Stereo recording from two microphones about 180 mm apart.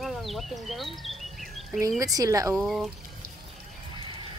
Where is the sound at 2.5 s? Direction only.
Centre (ahead or behind).